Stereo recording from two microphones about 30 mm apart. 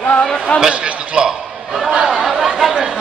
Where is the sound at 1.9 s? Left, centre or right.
Centre.